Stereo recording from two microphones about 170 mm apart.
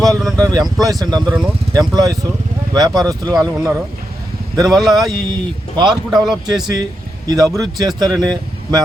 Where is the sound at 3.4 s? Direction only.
20° right (ahead or behind).